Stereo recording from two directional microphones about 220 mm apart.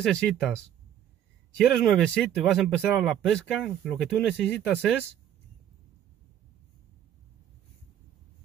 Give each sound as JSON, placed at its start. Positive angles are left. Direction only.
{"t": 0.0, "sound": "speech", "side_deg": 5}
{"t": 1.6, "sound": "speech", "side_deg": 0}